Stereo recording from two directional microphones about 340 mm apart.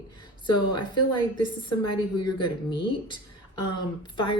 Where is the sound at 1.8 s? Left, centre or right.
Left.